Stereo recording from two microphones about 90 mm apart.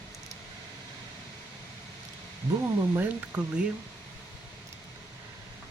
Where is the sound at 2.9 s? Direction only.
25° right (ahead or behind).